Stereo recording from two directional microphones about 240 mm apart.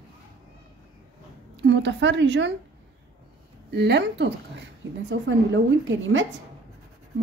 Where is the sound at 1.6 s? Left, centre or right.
Right.